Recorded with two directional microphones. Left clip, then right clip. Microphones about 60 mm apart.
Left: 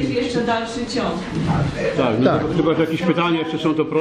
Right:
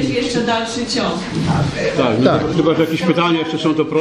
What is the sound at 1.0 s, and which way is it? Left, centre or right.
Speech, centre.